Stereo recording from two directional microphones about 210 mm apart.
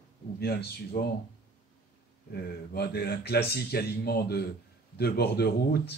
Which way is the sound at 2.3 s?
45° left (ahead or behind).